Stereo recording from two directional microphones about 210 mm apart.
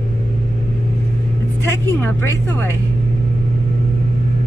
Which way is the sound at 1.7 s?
10° left (ahead or behind).